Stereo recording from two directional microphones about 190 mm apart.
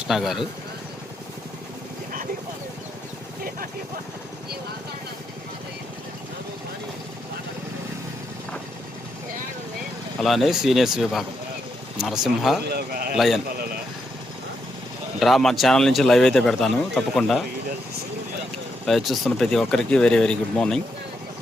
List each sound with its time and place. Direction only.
0.1 s speech: centre (ahead or behind)
10.2 s speech: centre (ahead or behind)
12.7 s a man's voice: 50° right (ahead or behind)
13.1 s speech: centre (ahead or behind)
15.2 s speech: centre (ahead or behind)
18.9 s speech: centre (ahead or behind)